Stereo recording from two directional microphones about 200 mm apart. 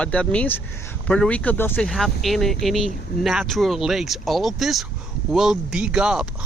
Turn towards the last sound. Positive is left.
turn(degrees=-5)  # may be behind; listen again after turning